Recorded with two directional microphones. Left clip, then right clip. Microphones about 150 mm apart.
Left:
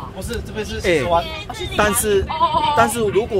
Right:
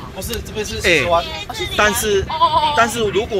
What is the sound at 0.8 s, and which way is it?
Speech, 35° left (ahead or behind).